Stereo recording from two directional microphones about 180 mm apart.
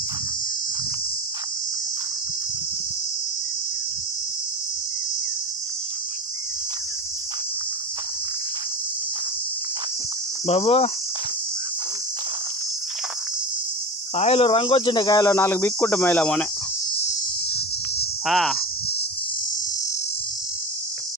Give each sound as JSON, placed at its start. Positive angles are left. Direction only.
{"t": 10.4, "sound": "cricket", "side_deg": 35}
{"t": 14.1, "sound": "speech", "side_deg": 35}
{"t": 18.2, "sound": "speech", "side_deg": 0}